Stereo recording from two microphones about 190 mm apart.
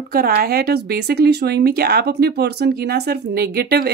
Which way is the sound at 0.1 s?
55° right (ahead or behind).